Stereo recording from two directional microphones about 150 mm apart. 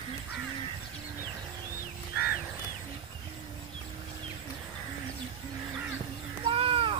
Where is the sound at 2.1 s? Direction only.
90° left.